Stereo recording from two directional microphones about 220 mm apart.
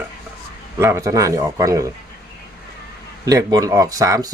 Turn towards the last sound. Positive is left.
turn(degrees=-15)  # may be behind; listen again after turning